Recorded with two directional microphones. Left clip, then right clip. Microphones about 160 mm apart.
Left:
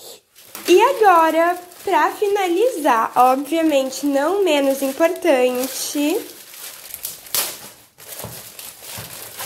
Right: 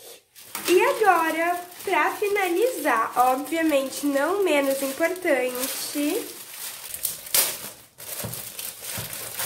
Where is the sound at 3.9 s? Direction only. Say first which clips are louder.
Left 5 dB; 20° left (ahead or behind).